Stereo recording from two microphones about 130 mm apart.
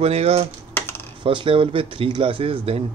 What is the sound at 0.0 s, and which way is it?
Speech, 50° right (ahead or behind).